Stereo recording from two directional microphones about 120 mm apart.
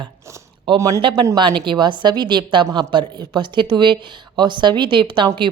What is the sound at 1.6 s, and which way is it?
A woman's voice, 40° right (ahead or behind).